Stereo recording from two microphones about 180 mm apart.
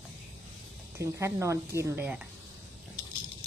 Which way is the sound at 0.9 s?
15° right (ahead or behind).